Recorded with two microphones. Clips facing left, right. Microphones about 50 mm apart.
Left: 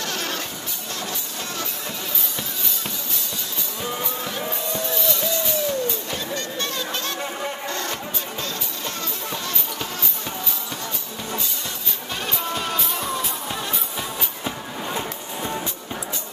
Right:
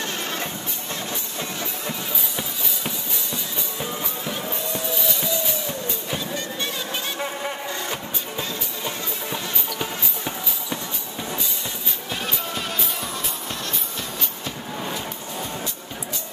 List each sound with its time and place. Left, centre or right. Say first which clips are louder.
0.0 s music: even; right
1.6 s music: right 1 dB; centre
4.7 s music: left 3 dB; centre
12.5 s music: left 2 dB; centre